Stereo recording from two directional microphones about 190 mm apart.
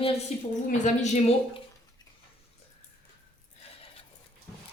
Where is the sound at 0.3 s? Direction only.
35° left (ahead or behind).